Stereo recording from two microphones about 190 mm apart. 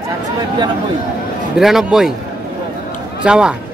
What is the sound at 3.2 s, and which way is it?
Speech, 5° right (ahead or behind).